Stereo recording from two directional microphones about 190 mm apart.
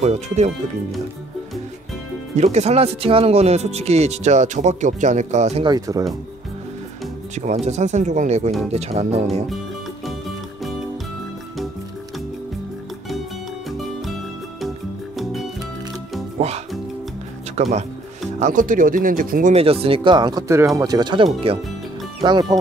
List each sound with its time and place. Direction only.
0.0 s speech: 35° right (ahead or behind)
2.3 s speech: 35° right (ahead or behind)
5.7 s speech: 20° right (ahead or behind)
7.3 s speech: 40° right (ahead or behind)
16.3 s music: 35° right (ahead or behind)
17.6 s speech: 35° right (ahead or behind)